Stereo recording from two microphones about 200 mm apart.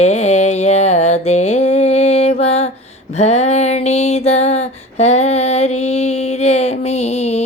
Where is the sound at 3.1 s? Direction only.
35° left (ahead or behind).